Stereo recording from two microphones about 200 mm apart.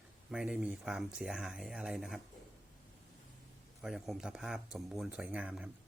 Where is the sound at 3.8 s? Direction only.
Centre (ahead or behind).